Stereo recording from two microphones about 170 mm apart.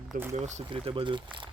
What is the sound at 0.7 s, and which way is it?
Speech, 30° right (ahead or behind).